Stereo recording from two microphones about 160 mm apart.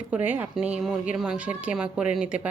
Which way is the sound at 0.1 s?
10° right (ahead or behind).